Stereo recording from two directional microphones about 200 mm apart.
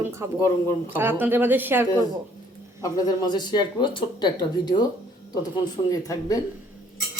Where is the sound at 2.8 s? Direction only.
20° left (ahead or behind).